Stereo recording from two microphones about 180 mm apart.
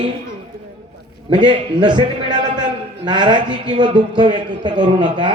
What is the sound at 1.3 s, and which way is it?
A man's voice, 25° right (ahead or behind).